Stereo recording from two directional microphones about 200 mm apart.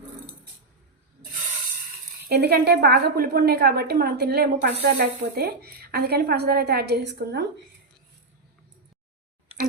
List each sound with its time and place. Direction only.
2.3 s speech: 55° right (ahead or behind)